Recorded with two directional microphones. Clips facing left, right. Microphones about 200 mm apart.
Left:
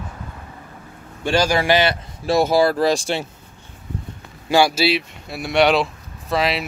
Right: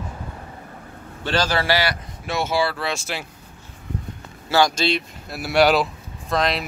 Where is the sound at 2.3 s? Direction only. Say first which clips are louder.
Left 7 dB; 35° left (ahead or behind).